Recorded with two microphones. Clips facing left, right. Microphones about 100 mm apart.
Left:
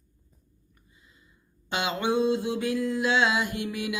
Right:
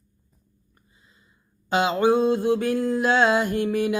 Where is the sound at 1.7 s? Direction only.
35° right (ahead or behind).